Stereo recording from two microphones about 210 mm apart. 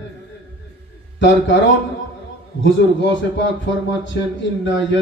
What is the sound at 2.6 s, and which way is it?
A man's voice, 60° left (ahead or behind).